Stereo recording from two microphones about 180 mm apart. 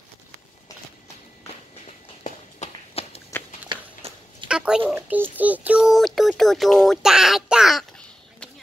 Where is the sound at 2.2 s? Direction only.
35° left (ahead or behind).